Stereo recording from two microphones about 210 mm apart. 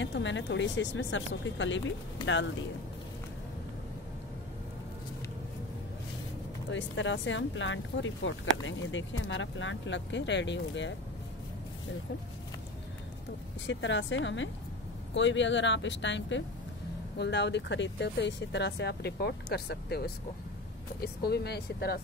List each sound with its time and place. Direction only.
0.0 s speech: 60° left (ahead or behind)
6.7 s speech: 60° left (ahead or behind)
13.7 s speech: 60° left (ahead or behind)